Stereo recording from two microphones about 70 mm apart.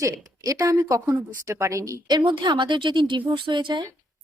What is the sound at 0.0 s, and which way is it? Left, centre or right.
A woman's voice, right.